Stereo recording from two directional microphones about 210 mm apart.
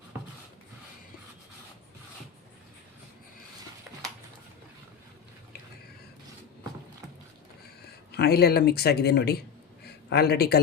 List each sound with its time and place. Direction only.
8.1 s speech: 50° left (ahead or behind)